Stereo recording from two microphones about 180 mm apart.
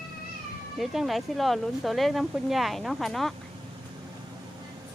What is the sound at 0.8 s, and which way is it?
Speech, centre (ahead or behind).